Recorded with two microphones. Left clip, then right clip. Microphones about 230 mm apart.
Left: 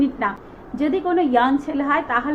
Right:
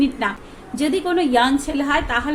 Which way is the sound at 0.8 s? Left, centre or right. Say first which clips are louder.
Even; centre.